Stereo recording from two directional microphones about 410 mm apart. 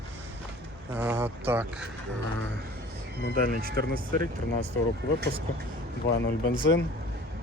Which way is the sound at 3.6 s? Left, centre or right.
Right.